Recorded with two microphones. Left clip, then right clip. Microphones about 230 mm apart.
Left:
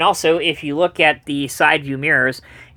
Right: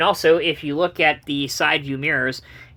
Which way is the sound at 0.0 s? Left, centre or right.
Left.